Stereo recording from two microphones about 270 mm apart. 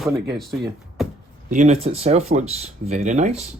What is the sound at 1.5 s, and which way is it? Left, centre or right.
Speech, right.